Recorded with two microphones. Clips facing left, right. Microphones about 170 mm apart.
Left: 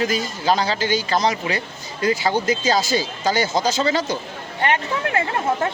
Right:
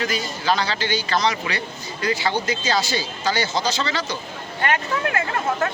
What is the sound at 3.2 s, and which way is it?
Speech, 50° left (ahead or behind).